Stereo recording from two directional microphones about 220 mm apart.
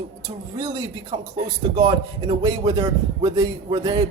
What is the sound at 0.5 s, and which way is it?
A man's voice, 15° right (ahead or behind).